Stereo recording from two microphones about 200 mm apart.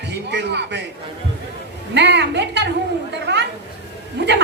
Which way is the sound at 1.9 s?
60° right (ahead or behind).